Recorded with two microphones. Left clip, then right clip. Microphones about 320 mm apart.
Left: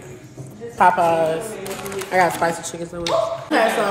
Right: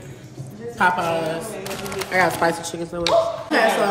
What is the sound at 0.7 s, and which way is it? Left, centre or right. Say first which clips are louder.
Speech: left 4 dB; centre.